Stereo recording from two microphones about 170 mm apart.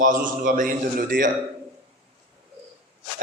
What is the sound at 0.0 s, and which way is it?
A man's voice, 50° right (ahead or behind).